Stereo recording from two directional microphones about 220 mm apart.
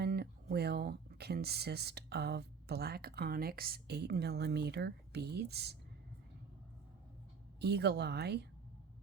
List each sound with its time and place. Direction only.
0.0 s a sound: 45° right (ahead or behind)
0.5 s speech: 45° right (ahead or behind)
7.6 s a woman's voice: 50° right (ahead or behind)